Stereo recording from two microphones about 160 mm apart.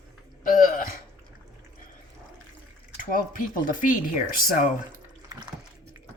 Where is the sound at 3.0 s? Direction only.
60° left (ahead or behind).